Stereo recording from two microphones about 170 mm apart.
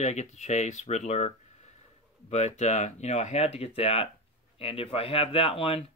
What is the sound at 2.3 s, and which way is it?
Speech, 40° left (ahead or behind).